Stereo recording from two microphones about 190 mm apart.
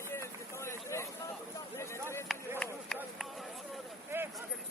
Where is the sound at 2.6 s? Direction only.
5° left (ahead or behind).